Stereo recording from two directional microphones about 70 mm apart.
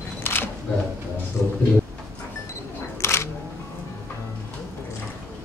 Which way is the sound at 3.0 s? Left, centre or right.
Left.